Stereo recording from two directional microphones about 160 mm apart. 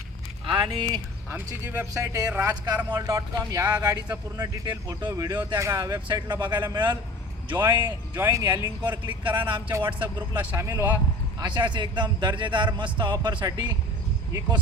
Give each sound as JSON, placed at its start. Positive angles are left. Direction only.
{"t": 0.4, "sound": "speech", "side_deg": -30}
{"t": 1.3, "sound": "a man's voice", "side_deg": -15}
{"t": 7.5, "sound": "a man's voice", "side_deg": -15}
{"t": 9.0, "sound": "speech", "side_deg": -30}
{"t": 9.4, "sound": "a man's voice", "side_deg": -15}
{"t": 11.4, "sound": "speech", "side_deg": -30}